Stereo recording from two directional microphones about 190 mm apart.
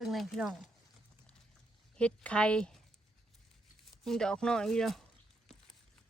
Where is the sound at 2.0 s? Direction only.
5° left (ahead or behind).